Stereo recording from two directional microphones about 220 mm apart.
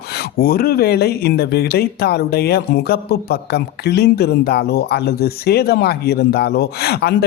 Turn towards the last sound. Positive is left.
turn(degrees=45)  # may be behind; listen again after turning